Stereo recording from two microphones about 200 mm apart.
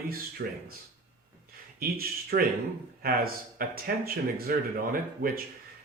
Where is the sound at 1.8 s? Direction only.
50° right (ahead or behind).